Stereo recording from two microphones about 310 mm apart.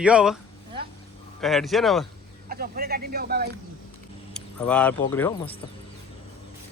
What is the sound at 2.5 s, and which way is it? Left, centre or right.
Speech, right.